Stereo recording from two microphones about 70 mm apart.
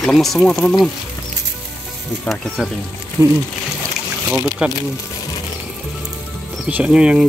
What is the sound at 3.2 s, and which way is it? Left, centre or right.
Speech, right.